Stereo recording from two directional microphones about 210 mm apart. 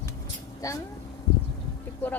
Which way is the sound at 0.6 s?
15° left (ahead or behind).